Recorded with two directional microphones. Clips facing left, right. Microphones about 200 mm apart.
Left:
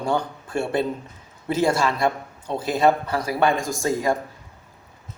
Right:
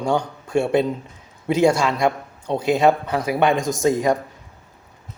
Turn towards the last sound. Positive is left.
turn(degrees=-20)  # may be behind; listen again after turning